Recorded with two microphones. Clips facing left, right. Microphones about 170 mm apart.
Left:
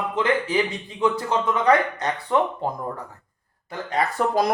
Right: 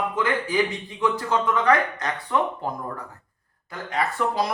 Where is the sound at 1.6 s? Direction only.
25° left (ahead or behind).